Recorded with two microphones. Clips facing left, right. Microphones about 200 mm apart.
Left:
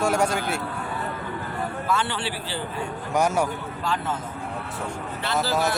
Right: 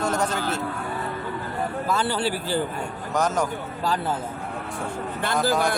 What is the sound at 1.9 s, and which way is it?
Speech, 40° right (ahead or behind).